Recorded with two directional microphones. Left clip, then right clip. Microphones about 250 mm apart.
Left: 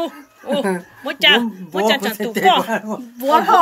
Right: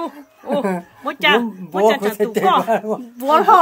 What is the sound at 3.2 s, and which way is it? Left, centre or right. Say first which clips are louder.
Speech: right 2 dB; right.